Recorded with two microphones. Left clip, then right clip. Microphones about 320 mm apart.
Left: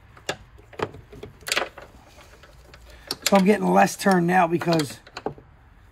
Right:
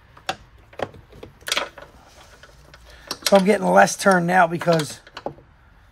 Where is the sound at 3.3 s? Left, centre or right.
Right.